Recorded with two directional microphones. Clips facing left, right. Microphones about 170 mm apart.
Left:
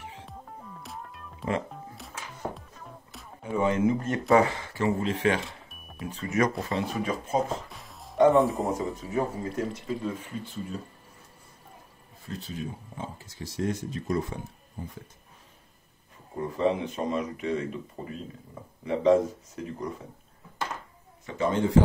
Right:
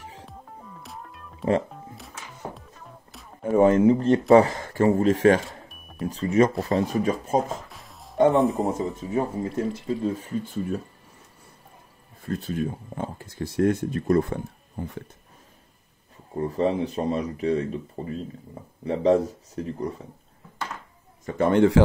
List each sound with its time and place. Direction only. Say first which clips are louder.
0.8 s music: even; centre (ahead or behind)
3.5 s speech: right 7 dB; 45° right (ahead or behind)
7.7 s music: even; centre (ahead or behind)
8.3 s speech: right 1 dB; centre (ahead or behind)
9.6 s speech: right 5 dB; 30° right (ahead or behind); by 10.8 s 50° right (ahead or behind)
12.2 s speech: right 8 dB; 55° right (ahead or behind)
16.4 s speech: right 2 dB; 35° right (ahead or behind)
21.3 s speech: right 6 dB; 60° right (ahead or behind); by 21.8 s 75° right (ahead or behind)